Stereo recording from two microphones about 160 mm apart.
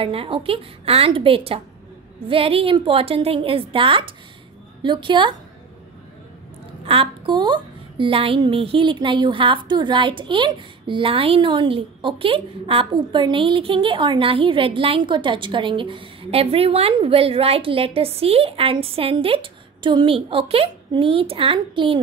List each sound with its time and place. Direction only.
0.0 s a woman's voice: 35° right (ahead or behind)
6.8 s a woman's voice: 35° right (ahead or behind)